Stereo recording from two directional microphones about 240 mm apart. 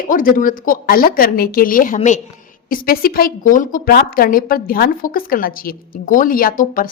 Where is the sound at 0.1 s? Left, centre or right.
Left.